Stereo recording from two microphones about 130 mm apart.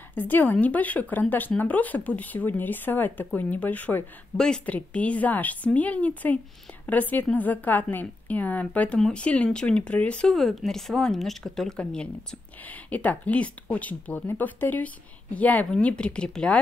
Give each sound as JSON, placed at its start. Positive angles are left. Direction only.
{"t": 0.1, "sound": "a woman's voice", "side_deg": 15}